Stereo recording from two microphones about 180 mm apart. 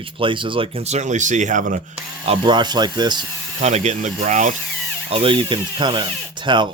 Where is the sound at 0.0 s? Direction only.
30° right (ahead or behind); by 2.0 s 45° right (ahead or behind).